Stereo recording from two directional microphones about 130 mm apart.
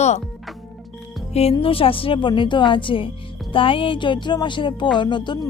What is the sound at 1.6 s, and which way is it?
Speech, 45° left (ahead or behind).